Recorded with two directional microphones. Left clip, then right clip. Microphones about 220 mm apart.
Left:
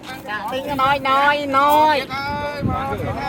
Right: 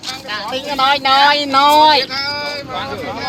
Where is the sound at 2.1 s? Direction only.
45° left (ahead or behind).